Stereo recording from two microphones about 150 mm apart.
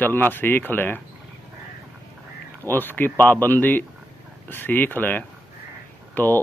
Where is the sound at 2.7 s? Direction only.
15° left (ahead or behind).